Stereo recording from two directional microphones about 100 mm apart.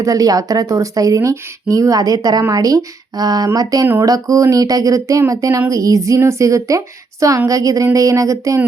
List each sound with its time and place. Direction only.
0.0 s speech: 35° right (ahead or behind)